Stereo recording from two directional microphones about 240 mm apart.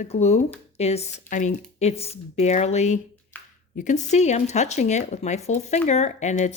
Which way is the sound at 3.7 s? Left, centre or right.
Left.